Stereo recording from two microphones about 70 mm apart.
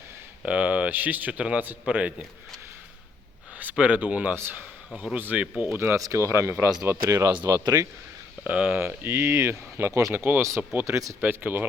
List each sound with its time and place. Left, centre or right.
0.4 s speech: centre
3.6 s speech: right
5.7 s speech: right
6.0 s speech: right
7.6 s speech: right
8.7 s speech: right
10.2 s speech: right
10.6 s speech: centre
10.8 s speech: right
11.2 s speech: right